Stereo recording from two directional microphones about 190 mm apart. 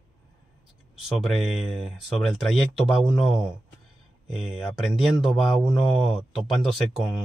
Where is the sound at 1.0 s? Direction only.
Centre (ahead or behind).